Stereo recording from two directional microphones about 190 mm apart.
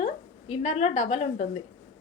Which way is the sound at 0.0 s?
35° left (ahead or behind).